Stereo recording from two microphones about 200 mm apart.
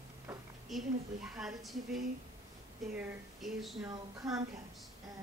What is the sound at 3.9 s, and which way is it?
Speech, 15° right (ahead or behind).